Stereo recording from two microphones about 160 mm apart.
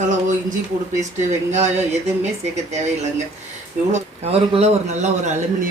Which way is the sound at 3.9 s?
40° right (ahead or behind).